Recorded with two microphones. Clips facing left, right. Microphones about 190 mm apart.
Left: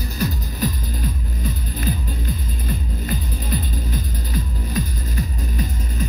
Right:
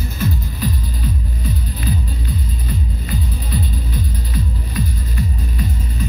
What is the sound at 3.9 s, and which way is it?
Music, 45° left (ahead or behind).